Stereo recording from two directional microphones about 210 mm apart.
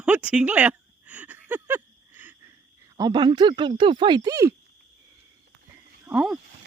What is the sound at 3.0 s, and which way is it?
Speech, 20° right (ahead or behind).